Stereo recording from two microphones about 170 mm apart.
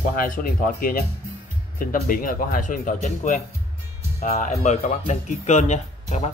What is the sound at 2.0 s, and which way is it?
Speech, 55° left (ahead or behind).